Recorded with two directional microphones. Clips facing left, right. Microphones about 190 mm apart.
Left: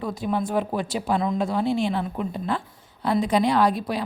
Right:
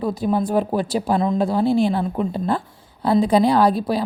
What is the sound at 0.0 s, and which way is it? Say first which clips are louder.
A woman's voice: right 5 dB; 35° right (ahead or behind).